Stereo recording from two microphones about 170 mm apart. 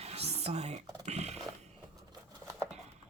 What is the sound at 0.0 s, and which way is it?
Music, 35° right (ahead or behind).